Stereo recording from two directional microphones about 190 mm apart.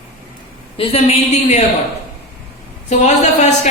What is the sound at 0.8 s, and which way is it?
Speech, 30° left (ahead or behind).